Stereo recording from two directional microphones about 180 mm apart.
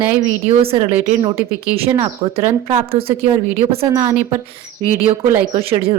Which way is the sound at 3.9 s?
15° right (ahead or behind).